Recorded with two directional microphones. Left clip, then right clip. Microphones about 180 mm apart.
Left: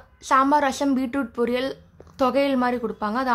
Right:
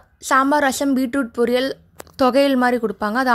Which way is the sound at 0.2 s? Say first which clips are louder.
Right 3 dB; 25° right (ahead or behind).